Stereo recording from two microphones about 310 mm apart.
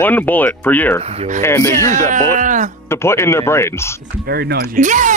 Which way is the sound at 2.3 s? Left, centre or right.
Right.